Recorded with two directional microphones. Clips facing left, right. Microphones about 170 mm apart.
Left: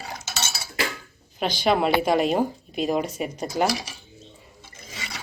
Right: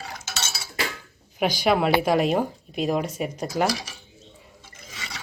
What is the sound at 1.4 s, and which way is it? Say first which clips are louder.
A woman's voice: right 1 dB; 10° right (ahead or behind).